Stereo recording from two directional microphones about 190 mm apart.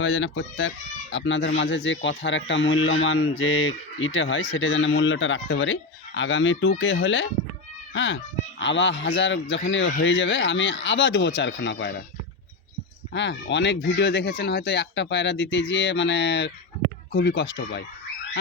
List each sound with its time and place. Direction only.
0.0 s speech: 85° left; by 11.9 s 65° left (ahead or behind)
13.1 s speech: 70° left (ahead or behind)